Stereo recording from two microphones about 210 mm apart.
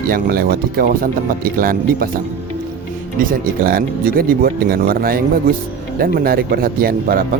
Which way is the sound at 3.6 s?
45° right (ahead or behind).